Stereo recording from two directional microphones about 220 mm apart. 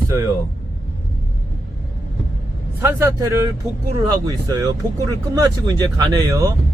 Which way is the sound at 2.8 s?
10° right (ahead or behind).